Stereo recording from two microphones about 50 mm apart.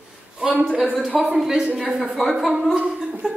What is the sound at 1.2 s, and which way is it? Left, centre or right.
Speech, centre.